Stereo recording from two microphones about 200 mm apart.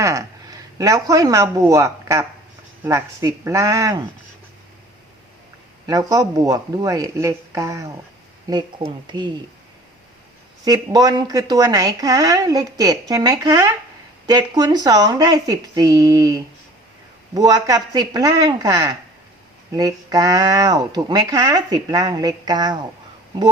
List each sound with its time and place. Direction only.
0.0 s speech: 15° right (ahead or behind)
5.8 s speech: 15° right (ahead or behind)
10.7 s speech: 20° right (ahead or behind)